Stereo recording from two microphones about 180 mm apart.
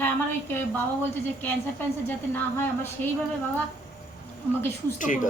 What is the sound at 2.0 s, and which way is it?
A woman's voice, 10° left (ahead or behind).